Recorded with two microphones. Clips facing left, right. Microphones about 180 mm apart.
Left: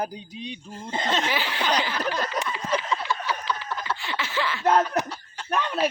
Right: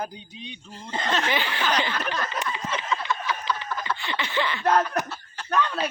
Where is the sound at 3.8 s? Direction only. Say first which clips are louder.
Right 1 dB; centre (ahead or behind).